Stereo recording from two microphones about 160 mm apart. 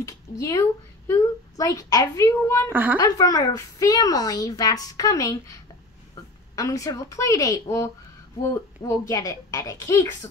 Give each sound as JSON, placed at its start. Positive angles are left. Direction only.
{"t": 0.0, "sound": "a woman's voice", "side_deg": 20}
{"t": 2.7, "sound": "a woman's voice", "side_deg": -10}
{"t": 3.0, "sound": "speech", "side_deg": 20}